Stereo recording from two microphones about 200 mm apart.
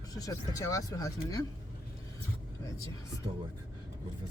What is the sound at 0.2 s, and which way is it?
Speech, 15° left (ahead or behind).